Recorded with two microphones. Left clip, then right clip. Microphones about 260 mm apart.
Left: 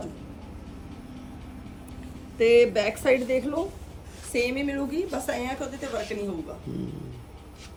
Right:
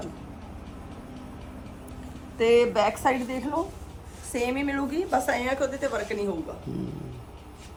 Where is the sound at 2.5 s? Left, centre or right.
Centre.